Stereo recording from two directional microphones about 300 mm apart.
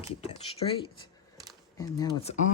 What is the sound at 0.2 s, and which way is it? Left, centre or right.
Speech, centre.